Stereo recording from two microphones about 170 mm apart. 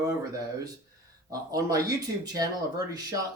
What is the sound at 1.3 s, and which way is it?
Speech, 20° right (ahead or behind).